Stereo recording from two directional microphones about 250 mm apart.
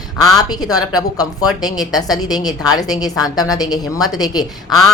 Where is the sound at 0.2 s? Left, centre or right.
Centre.